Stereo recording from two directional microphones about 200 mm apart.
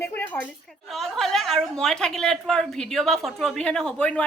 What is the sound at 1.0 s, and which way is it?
A woman's voice, centre (ahead or behind).